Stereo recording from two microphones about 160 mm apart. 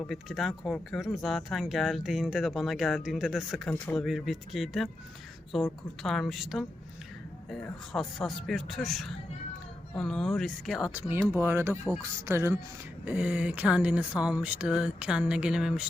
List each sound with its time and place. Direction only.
0.0 s speech: centre (ahead or behind)
10.9 s speech: 15° right (ahead or behind)